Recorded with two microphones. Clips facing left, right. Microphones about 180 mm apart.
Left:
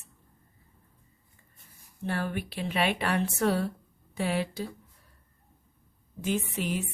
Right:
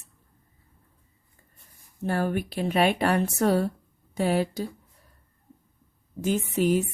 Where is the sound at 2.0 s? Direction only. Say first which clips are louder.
Right 5 dB; 45° right (ahead or behind).